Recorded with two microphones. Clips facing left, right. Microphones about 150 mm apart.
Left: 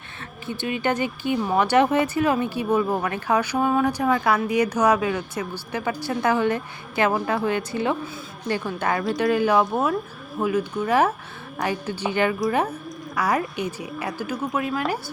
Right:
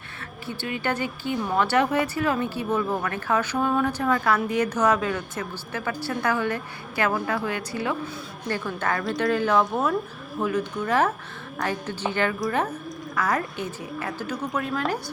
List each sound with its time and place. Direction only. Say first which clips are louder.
0.4 s a woman's voice: left 4 dB; 20° left (ahead or behind)